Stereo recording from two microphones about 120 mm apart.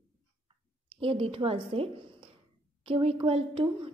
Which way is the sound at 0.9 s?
50° right (ahead or behind).